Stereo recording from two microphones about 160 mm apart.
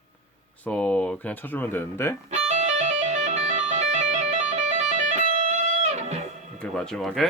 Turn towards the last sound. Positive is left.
turn(degrees=0)  # may be behind; listen again after turning